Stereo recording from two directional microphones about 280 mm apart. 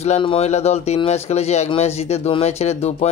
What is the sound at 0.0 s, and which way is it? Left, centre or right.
Speech, left.